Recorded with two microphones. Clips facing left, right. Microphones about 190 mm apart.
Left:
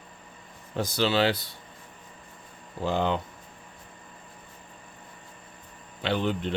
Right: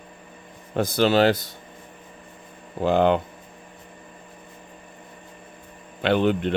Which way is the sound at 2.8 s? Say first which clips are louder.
Right 8 dB; 60° right (ahead or behind).